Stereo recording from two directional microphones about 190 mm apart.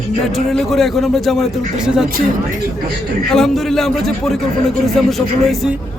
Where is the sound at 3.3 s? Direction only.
Centre (ahead or behind).